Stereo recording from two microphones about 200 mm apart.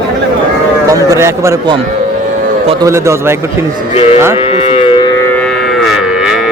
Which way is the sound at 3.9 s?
30° left (ahead or behind).